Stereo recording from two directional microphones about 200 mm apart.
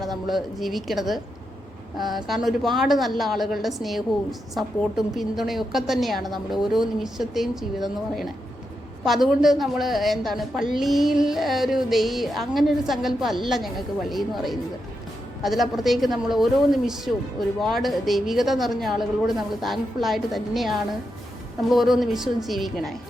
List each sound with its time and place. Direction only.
0.0 s a woman's voice: centre (ahead or behind)